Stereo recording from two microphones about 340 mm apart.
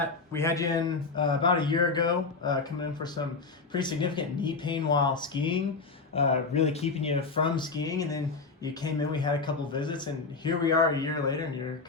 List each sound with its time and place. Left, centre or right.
0.3 s speech: centre